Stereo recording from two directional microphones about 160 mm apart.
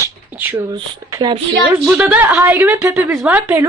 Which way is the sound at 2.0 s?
10° right (ahead or behind).